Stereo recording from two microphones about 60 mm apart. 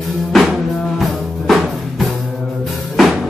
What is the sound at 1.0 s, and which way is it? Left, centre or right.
Music, centre.